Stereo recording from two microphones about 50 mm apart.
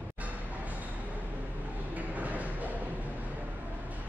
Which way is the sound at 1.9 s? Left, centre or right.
Right.